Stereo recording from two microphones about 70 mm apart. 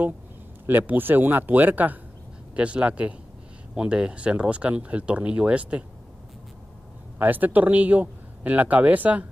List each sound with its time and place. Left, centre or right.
0.7 s speech: right
7.2 s speech: right